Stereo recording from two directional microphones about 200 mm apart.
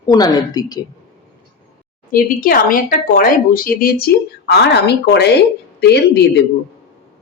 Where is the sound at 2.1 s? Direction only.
45° left (ahead or behind).